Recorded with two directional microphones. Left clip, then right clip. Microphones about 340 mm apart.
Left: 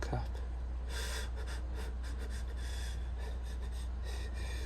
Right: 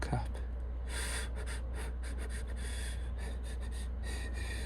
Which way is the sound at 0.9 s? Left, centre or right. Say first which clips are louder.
Right 2 dB; centre.